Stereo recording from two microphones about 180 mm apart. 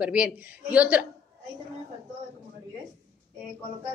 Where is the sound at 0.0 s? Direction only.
10° right (ahead or behind).